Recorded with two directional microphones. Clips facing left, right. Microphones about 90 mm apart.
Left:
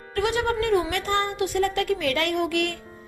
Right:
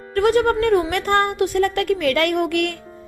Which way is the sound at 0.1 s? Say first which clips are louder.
Right 7 dB; 45° right (ahead or behind).